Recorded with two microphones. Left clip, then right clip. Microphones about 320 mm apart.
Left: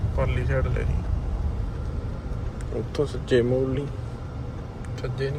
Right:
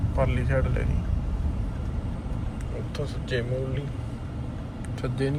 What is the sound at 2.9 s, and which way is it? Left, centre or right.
Speech, centre.